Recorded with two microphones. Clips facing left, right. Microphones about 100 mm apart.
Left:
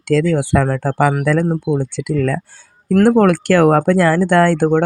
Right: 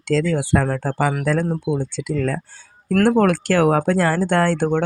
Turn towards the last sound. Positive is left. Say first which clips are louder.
# left 5 dB
turn(degrees=50)  # may be behind; listen again after turning